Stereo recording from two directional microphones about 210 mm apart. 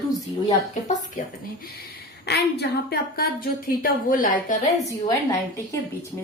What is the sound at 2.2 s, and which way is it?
A woman's voice, 50° left (ahead or behind).